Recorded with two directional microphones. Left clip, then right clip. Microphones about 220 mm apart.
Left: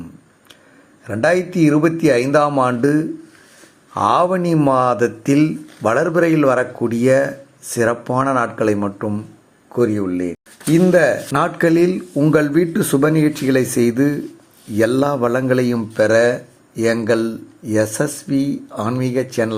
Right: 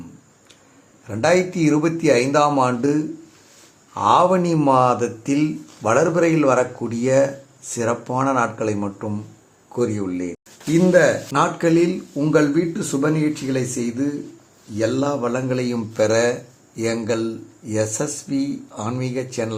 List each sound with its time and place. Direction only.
1.0 s speech: 10° left (ahead or behind)